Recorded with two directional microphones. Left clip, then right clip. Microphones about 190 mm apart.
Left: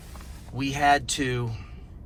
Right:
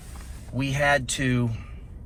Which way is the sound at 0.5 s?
15° left (ahead or behind).